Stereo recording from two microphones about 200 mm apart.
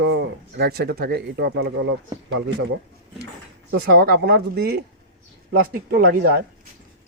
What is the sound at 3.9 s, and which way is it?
Speech, 55° right (ahead or behind).